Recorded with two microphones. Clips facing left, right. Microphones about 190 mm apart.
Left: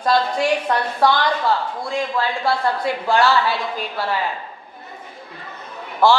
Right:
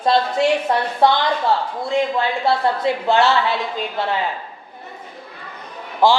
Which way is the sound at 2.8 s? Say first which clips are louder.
Right 1 dB; 25° right (ahead or behind).